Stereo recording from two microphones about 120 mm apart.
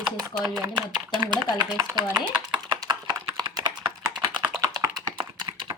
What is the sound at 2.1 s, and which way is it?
Speech, 10° right (ahead or behind).